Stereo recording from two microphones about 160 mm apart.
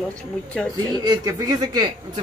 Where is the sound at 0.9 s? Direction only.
25° right (ahead or behind).